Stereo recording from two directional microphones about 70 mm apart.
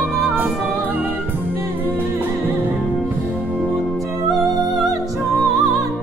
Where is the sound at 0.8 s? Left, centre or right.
Right.